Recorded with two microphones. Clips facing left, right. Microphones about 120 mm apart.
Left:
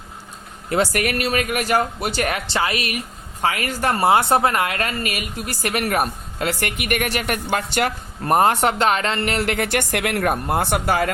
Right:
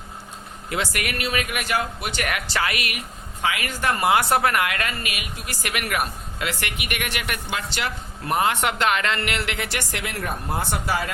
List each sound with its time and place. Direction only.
0.7 s a woman's voice: 40° left (ahead or behind); by 11.1 s 60° left (ahead or behind)